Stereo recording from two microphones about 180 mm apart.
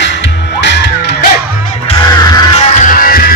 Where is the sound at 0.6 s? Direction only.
70° left (ahead or behind).